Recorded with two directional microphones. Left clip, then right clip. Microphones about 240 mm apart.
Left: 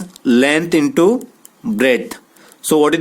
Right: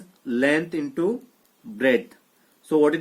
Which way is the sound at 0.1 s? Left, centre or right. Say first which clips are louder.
Left 8 dB; left.